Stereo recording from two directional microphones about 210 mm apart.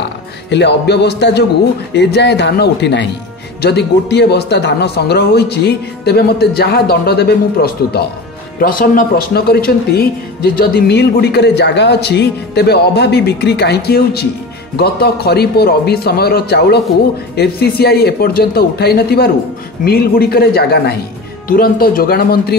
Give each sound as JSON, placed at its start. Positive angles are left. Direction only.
{"t": 0.5, "sound": "speech", "side_deg": 55}